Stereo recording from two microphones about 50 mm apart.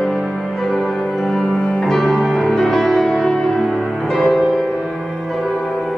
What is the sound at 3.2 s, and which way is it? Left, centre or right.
Music, centre.